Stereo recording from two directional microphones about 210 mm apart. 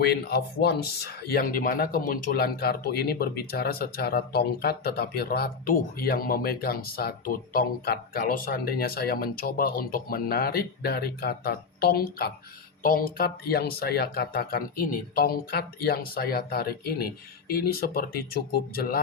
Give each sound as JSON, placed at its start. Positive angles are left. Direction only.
{"t": 0.0, "sound": "speech", "side_deg": 50}